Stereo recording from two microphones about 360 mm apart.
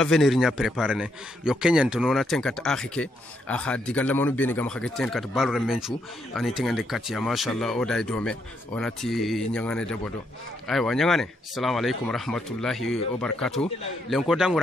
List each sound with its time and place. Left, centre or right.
0.0 s a man's voice: centre